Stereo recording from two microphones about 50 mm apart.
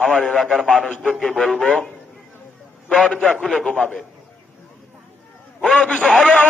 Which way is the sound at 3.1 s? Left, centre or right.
Left.